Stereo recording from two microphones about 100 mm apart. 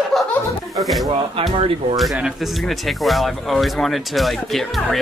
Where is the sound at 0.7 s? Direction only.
Centre (ahead or behind).